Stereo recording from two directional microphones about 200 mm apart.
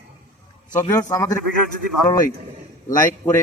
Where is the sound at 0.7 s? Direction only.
15° left (ahead or behind).